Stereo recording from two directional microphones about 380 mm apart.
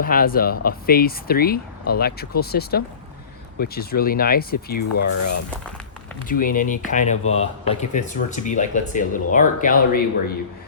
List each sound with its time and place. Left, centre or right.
0.0 s speech: left
4.8 s speech: left
6.2 s speech: left